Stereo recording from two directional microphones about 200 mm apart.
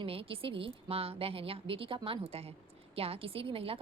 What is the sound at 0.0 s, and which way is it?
A woman's voice, 30° right (ahead or behind).